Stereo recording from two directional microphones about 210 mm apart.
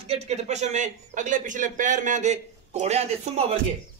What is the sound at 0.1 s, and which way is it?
A man's voice, 30° right (ahead or behind).